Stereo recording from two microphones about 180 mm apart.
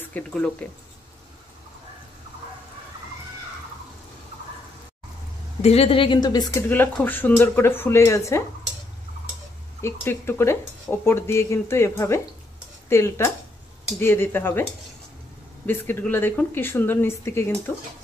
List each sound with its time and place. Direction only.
0.1 s speech: 5° left (ahead or behind)
5.6 s speech: 35° left (ahead or behind)
6.7 s speech: 10° left (ahead or behind)
9.8 s speech: 15° left (ahead or behind)
15.6 s speech: 10° left (ahead or behind)